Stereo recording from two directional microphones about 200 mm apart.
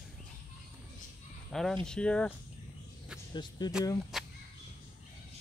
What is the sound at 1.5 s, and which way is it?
Speech, centre (ahead or behind).